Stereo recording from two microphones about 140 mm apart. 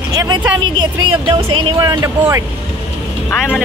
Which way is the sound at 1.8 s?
30° right (ahead or behind).